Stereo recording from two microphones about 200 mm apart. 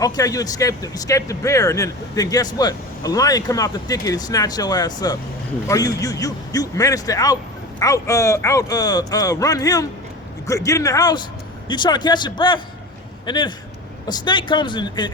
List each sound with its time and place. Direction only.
0.0 s speech: 20° left (ahead or behind)